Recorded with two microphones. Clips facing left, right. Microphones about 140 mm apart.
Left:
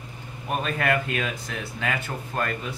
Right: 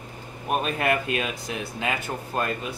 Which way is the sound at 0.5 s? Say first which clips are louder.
Right 1 dB; 20° right (ahead or behind).